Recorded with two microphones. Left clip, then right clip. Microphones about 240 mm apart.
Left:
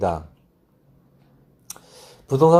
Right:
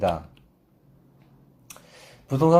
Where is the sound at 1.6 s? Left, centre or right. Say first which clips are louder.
Left 4 dB; left.